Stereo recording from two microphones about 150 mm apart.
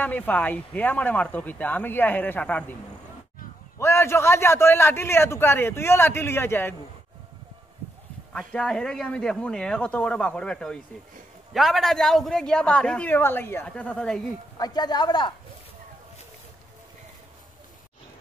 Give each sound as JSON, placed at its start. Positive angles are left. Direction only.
{"t": 0.0, "sound": "a man's voice", "side_deg": 10}
{"t": 3.8, "sound": "a man's voice", "side_deg": 15}
{"t": 8.3, "sound": "a man's voice", "side_deg": 5}
{"t": 14.6, "sound": "speech", "side_deg": 25}